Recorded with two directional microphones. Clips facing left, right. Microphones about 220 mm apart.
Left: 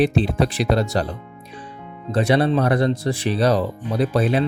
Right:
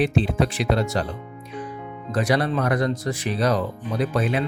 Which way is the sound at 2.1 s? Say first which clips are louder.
Left 4 dB; 25° left (ahead or behind).